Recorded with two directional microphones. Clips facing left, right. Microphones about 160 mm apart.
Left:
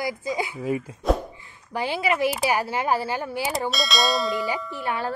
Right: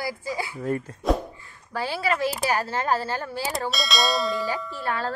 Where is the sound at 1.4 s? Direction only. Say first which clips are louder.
Left 2 dB; 20° left (ahead or behind).